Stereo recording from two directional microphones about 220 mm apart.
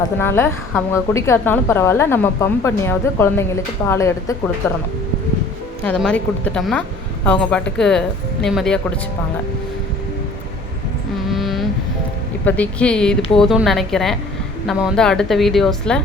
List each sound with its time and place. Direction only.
0.0 s a woman's voice: 10° left (ahead or behind)
5.8 s a woman's voice: 5° left (ahead or behind)
11.3 s vehicle: centre (ahead or behind)
12.5 s a woman's voice: 5° left (ahead or behind)